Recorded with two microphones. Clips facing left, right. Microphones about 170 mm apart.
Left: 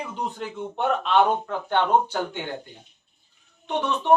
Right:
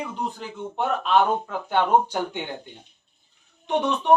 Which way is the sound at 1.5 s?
10° right (ahead or behind).